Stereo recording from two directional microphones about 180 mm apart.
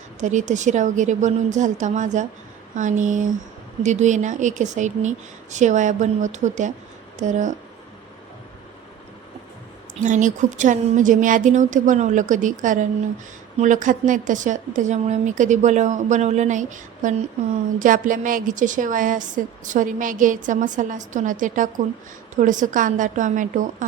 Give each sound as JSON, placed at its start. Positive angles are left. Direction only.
{"t": 0.2, "sound": "a woman's voice", "side_deg": -45}
{"t": 10.0, "sound": "a woman's voice", "side_deg": -45}